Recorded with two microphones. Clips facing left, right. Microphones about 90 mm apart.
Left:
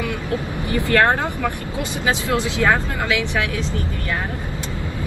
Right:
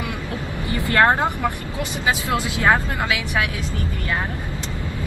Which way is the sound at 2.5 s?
20° right (ahead or behind).